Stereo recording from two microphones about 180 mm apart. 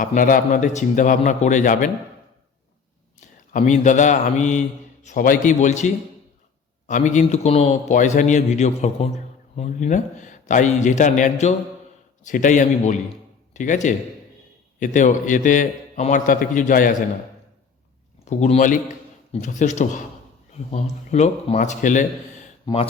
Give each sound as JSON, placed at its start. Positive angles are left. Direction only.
{"t": 0.0, "sound": "a man's voice", "side_deg": 50}
{"t": 3.2, "sound": "a man's voice", "side_deg": 45}
{"t": 18.3, "sound": "a man's voice", "side_deg": 40}
{"t": 22.6, "sound": "speech", "side_deg": 30}